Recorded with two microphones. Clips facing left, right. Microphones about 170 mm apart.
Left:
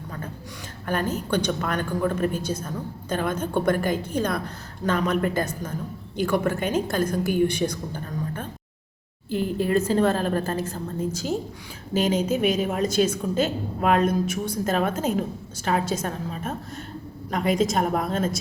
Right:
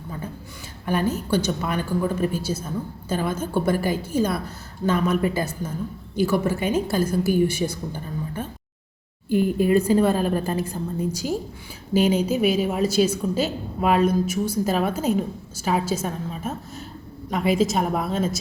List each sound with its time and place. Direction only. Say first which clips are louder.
0.9 s a woman's voice: right 3 dB; 10° right (ahead or behind)